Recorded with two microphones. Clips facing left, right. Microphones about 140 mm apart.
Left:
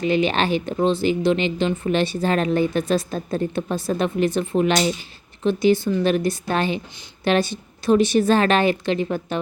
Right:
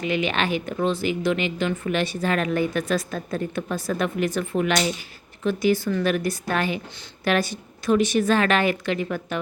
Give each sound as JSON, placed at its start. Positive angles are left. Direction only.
{"t": 0.0, "sound": "speech", "side_deg": 30}